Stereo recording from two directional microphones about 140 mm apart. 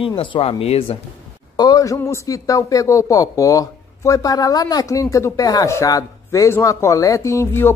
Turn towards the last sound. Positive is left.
turn(degrees=20)  # may be behind; listen again after turning